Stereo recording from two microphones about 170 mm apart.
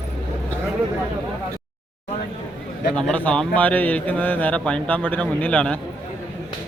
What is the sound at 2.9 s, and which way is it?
A man's voice, 5° left (ahead or behind).